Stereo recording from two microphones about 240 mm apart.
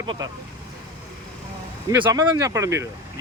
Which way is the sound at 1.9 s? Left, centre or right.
Centre.